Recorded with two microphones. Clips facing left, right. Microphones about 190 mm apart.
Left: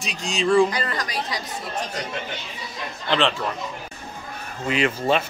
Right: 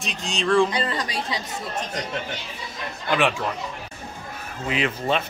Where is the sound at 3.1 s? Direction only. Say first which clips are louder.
Even; 10° right (ahead or behind).